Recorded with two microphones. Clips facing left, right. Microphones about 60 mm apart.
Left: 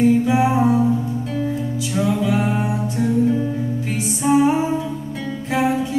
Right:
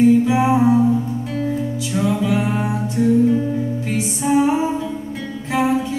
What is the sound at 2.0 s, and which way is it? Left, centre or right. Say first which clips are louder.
Music: even; centre.